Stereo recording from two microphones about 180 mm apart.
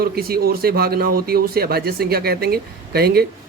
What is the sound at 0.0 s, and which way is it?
A man's voice, 55° right (ahead or behind).